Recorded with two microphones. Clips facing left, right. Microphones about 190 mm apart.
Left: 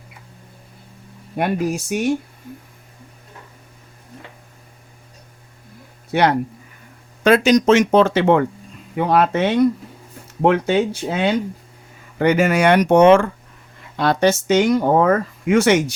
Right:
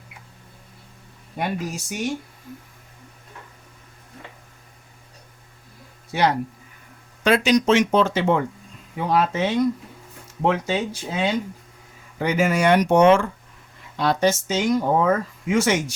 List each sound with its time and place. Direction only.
1.4 s speech: 60° left (ahead or behind)
6.1 s speech: 65° left (ahead or behind)
7.3 s speech: 45° left (ahead or behind)
7.9 s speech: 65° left (ahead or behind)